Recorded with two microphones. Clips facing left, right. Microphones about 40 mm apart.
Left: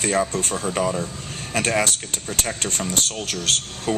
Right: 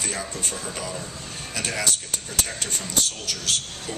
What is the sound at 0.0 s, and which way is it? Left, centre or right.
Speech, left.